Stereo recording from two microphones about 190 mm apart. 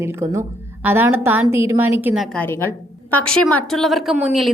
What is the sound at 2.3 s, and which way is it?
A woman's voice, 10° left (ahead or behind).